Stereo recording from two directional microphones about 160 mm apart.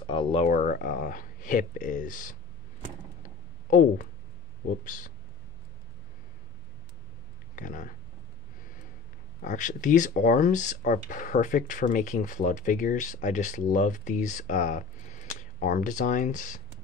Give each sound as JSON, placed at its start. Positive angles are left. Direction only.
{"t": 0.0, "sound": "a sound", "side_deg": 30}
{"t": 0.4, "sound": "speech", "side_deg": 55}
{"t": 4.8, "sound": "speech", "side_deg": 55}
{"t": 7.5, "sound": "speech", "side_deg": 55}
{"t": 9.4, "sound": "speech", "side_deg": 55}